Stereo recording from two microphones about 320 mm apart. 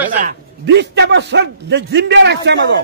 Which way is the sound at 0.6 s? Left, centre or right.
Right.